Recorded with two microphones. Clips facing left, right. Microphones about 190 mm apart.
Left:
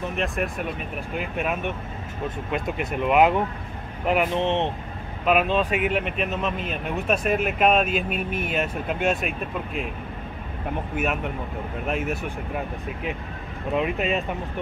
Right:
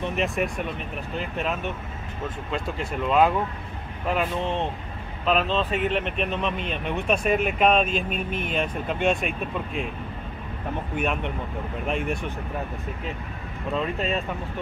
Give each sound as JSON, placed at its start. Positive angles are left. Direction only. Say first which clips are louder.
{"t": 0.1, "sound": "speech", "louder": "right 2 dB", "side_deg": 0}
{"t": 1.1, "sound": "speech", "louder": "left 1 dB", "side_deg": 15}
{"t": 11.0, "sound": "speech", "louder": "even", "side_deg": 5}
{"t": 13.7, "sound": "speech", "louder": "left 3 dB", "side_deg": 15}